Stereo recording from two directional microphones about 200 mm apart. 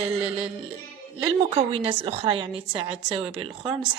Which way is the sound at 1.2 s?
25° right (ahead or behind).